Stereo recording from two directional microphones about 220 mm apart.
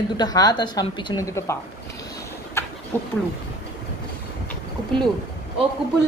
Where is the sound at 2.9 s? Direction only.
10° left (ahead or behind).